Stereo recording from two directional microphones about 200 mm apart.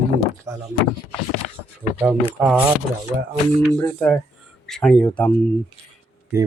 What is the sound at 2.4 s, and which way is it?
Speech, 5° right (ahead or behind).